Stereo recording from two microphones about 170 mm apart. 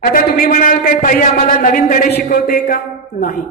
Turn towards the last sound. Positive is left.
turn(degrees=60)  # may be behind; listen again after turning